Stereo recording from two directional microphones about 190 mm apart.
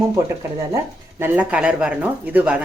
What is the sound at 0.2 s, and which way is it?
Speech, 20° right (ahead or behind).